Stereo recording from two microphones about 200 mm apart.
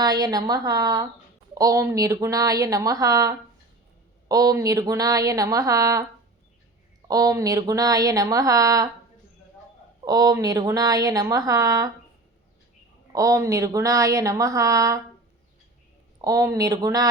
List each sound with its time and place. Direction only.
0.0 s a woman's voice: 20° right (ahead or behind)
7.1 s speech: 15° right (ahead or behind)
10.1 s a woman's voice: 20° right (ahead or behind)
13.1 s speech: 15° right (ahead or behind)
16.2 s speech: 15° right (ahead or behind)